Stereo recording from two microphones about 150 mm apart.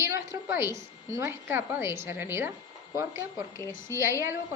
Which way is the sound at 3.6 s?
15° left (ahead or behind).